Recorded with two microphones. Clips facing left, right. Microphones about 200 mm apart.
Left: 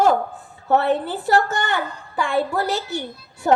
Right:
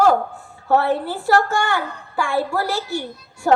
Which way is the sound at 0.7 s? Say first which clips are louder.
Even; 20° left (ahead or behind).